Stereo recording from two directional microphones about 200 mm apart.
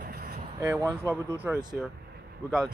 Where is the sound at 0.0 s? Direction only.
45° right (ahead or behind).